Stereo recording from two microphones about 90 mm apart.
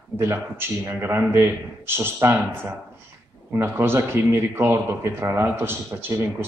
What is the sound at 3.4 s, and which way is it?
Speech, 25° right (ahead or behind).